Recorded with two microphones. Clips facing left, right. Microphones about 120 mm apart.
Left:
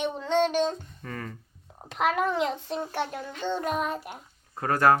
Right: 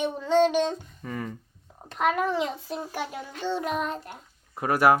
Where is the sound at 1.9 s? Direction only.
Centre (ahead or behind).